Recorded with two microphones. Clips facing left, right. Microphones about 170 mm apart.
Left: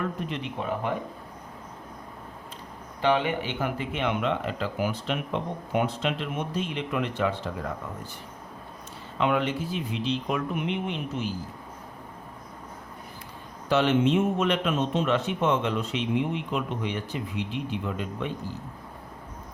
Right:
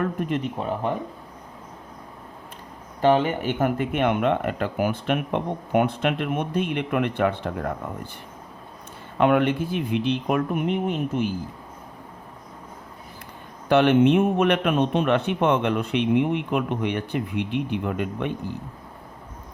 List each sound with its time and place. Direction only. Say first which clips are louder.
0.0 s speech: right 6 dB; 50° right (ahead or behind)
0.6 s speech: right 3 dB; 30° right (ahead or behind)
3.0 s speech: right 5 dB; 40° right (ahead or behind)
9.1 s speech: right 6 dB; 55° right (ahead or behind)
13.7 s speech: right 5 dB; 60° right (ahead or behind)